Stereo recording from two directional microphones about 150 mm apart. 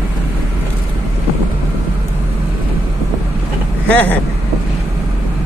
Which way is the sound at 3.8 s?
10° left (ahead or behind).